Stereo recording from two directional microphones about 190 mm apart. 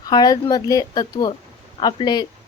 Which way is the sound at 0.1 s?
20° left (ahead or behind).